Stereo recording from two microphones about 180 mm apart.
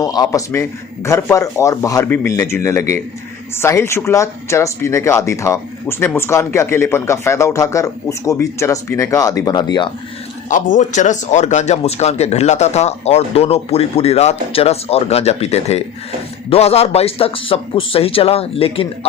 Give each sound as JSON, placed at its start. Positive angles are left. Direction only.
{"t": 0.0, "sound": "speech", "side_deg": 20}
{"t": 10.5, "sound": "speech", "side_deg": 45}